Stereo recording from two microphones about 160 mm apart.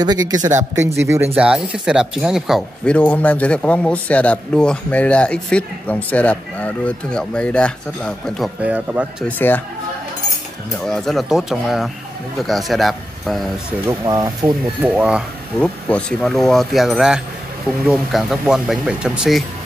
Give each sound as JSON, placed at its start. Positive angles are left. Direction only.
{"t": 0.0, "sound": "speech", "side_deg": -25}
{"t": 1.3, "sound": "speech", "side_deg": -5}
{"t": 8.6, "sound": "speech", "side_deg": -10}
{"t": 9.4, "sound": "speech", "side_deg": 15}
{"t": 10.9, "sound": "speech", "side_deg": 0}
{"t": 13.8, "sound": "speech", "side_deg": -25}
{"t": 14.8, "sound": "speech", "side_deg": -5}
{"t": 15.9, "sound": "speech", "side_deg": 5}